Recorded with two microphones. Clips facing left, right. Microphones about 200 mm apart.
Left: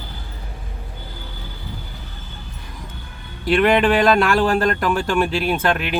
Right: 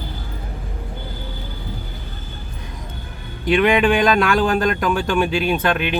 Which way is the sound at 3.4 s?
Centre (ahead or behind).